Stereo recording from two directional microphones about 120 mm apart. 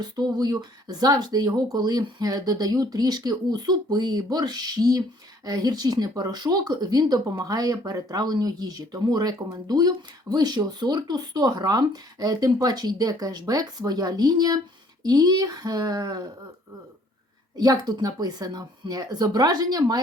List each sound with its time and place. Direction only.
0.0 s speech: 35° right (ahead or behind)
17.6 s speech: 35° right (ahead or behind)